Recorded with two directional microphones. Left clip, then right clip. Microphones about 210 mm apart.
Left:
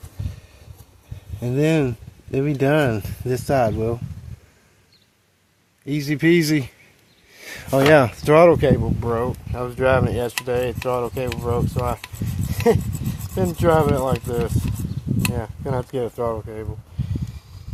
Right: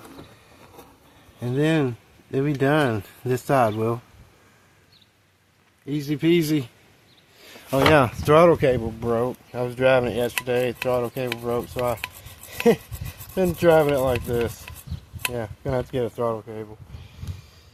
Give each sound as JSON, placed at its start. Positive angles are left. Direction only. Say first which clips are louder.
{"t": 1.4, "sound": "speech", "louder": "left 2 dB", "side_deg": 30}
{"t": 5.8, "sound": "speech", "louder": "left 4 dB", "side_deg": 35}
{"t": 7.9, "sound": "speech", "louder": "left 2 dB", "side_deg": 20}
{"t": 9.0, "sound": "speech", "louder": "left 1 dB", "side_deg": 10}
{"t": 15.4, "sound": "speech", "louder": "even", "side_deg": 10}